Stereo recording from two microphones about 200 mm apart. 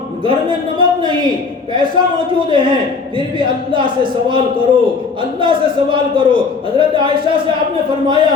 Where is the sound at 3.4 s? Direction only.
25° right (ahead or behind).